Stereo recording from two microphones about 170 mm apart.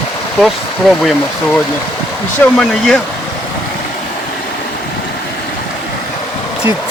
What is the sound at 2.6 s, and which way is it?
Speech, 5° left (ahead or behind).